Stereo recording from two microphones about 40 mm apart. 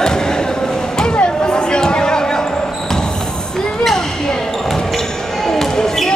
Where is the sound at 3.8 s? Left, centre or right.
Centre.